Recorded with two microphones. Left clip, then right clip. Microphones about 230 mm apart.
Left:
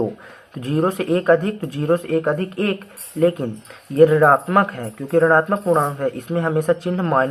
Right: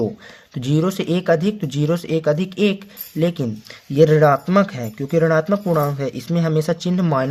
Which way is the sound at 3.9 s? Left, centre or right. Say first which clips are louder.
Left 1 dB; right.